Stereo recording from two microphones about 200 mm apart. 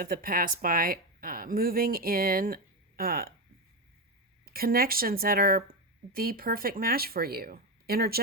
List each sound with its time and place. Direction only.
0.0 s speech: 45° right (ahead or behind)
4.4 s speech: 45° right (ahead or behind)